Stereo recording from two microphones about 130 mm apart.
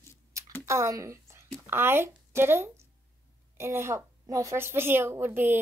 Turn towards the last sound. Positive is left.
turn(degrees=-15)  # may be behind; listen again after turning